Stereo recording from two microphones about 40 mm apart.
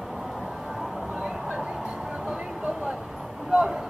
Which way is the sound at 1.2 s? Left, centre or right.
Centre.